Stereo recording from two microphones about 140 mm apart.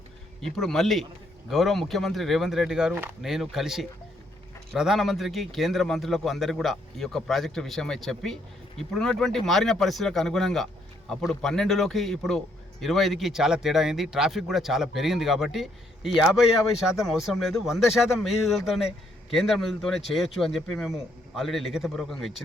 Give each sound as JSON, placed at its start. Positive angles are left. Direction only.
{"t": 0.4, "sound": "speech", "side_deg": 5}
{"t": 2.9, "sound": "speech", "side_deg": -15}
{"t": 3.2, "sound": "speech", "side_deg": 0}